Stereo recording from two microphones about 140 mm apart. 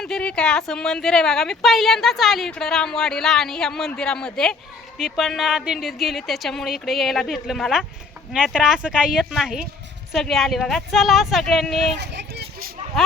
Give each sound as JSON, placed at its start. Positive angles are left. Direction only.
{"t": 0.0, "sound": "speech", "side_deg": 5}